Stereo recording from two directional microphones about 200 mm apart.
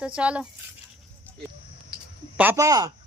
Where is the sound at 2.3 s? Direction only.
10° right (ahead or behind).